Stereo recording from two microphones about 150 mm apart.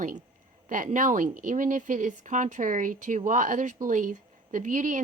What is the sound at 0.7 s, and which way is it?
Speech, 60° right (ahead or behind).